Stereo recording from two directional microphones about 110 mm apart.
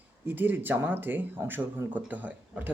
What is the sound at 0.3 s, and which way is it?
Speech, 15° right (ahead or behind).